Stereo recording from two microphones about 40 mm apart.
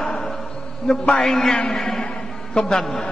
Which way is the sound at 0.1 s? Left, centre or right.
Centre.